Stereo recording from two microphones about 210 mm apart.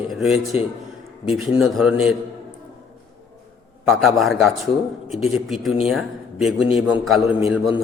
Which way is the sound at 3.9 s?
Centre (ahead or behind).